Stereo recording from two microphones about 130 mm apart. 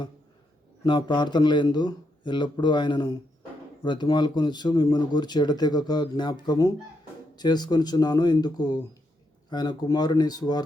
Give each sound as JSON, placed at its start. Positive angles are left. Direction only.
{"t": 0.9, "sound": "speech", "side_deg": 35}